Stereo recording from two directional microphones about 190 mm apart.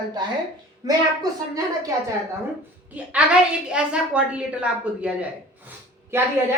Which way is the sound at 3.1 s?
5° right (ahead or behind).